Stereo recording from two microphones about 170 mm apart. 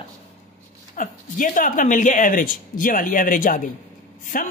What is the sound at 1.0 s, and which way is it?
Speech, 50° left (ahead or behind).